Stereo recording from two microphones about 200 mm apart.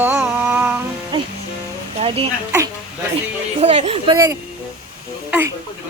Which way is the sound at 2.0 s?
30° right (ahead or behind).